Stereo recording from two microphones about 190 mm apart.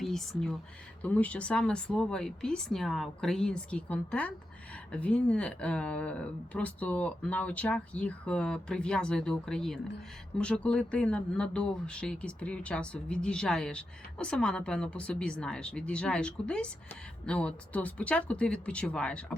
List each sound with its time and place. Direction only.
0.0 s speech: centre (ahead or behind)